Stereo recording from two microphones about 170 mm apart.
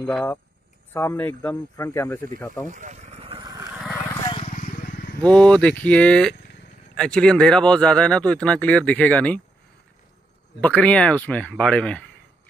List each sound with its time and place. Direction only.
0.0 s speech: 5° left (ahead or behind)
2.6 s a sound: 45° right (ahead or behind)
3.4 s vehicle: 20° right (ahead or behind)
4.5 s vehicle: 50° left (ahead or behind)
5.2 s speech: 5° left (ahead or behind)
10.6 s speech: 10° left (ahead or behind)